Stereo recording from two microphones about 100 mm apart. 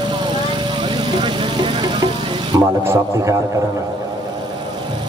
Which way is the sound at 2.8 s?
30° right (ahead or behind).